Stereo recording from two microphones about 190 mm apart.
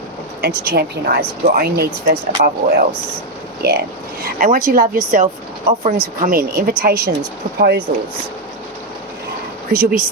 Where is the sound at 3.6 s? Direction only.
55° right (ahead or behind).